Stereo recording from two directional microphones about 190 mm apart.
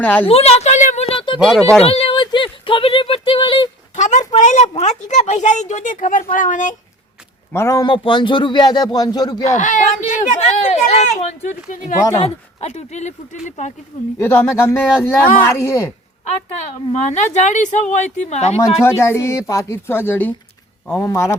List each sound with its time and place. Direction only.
0.0 s speech: 10° left (ahead or behind)
0.3 s a sound: 30° left (ahead or behind)
1.4 s speech: centre (ahead or behind)
1.8 s speech: 30° left (ahead or behind)
3.9 s speech: 40° left (ahead or behind)
7.5 s a man's voice: 15° left (ahead or behind)
9.5 s speech: 40° left (ahead or behind)
14.2 s speech: 10° left (ahead or behind)
17.0 s speech: 40° left (ahead or behind)
18.8 s speech: 15° left (ahead or behind)